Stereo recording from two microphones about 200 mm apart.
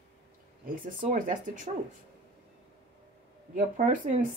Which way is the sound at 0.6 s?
40° right (ahead or behind).